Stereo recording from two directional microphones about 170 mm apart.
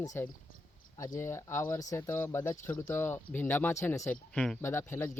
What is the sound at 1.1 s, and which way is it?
Speech, 15° left (ahead or behind).